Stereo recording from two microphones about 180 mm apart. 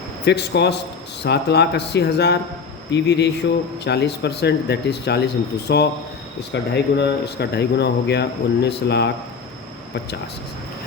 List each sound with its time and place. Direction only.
0.3 s speech: 70° left (ahead or behind)